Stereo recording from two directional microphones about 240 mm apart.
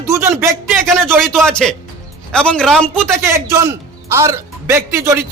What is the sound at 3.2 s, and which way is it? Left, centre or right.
A man's voice, centre.